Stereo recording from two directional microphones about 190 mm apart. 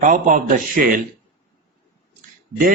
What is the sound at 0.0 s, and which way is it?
Speech, 45° right (ahead or behind).